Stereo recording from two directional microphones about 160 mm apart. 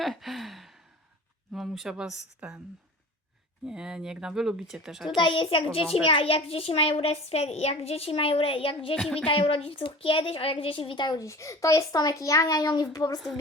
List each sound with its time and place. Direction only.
0.0 s a sound: centre (ahead or behind)
1.5 s speech: centre (ahead or behind)
3.7 s speech: 5° right (ahead or behind)
5.0 s a child's voice: 30° left (ahead or behind)
9.0 s speech: 5° left (ahead or behind)
9.2 s a woman's voice: 35° left (ahead or behind)